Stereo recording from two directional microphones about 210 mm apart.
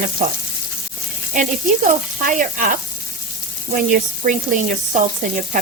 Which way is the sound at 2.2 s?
40° right (ahead or behind).